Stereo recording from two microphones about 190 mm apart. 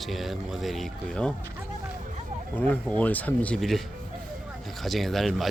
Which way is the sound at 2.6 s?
5° left (ahead or behind).